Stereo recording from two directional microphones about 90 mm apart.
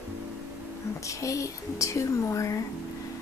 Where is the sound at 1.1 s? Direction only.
35° left (ahead or behind).